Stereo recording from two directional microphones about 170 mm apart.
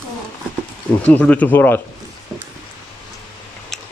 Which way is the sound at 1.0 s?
10° left (ahead or behind).